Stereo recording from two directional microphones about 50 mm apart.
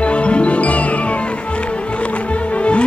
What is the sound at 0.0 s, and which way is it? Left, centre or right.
Music, left.